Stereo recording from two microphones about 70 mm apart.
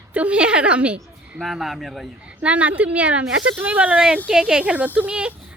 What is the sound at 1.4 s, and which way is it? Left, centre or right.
Speech, centre.